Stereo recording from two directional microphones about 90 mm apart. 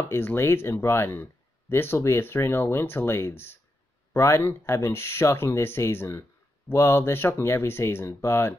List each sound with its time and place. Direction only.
0.1 s speech: 25° left (ahead or behind)